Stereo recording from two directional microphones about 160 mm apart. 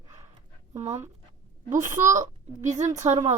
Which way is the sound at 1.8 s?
20° right (ahead or behind).